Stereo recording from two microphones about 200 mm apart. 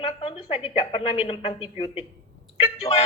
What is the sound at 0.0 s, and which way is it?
A woman's voice, 30° left (ahead or behind).